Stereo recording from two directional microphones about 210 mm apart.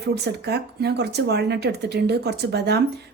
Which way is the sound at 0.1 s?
50° right (ahead or behind).